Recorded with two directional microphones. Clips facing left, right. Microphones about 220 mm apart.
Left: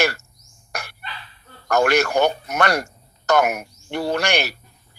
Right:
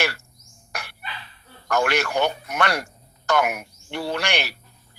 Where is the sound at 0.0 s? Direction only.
45° left (ahead or behind).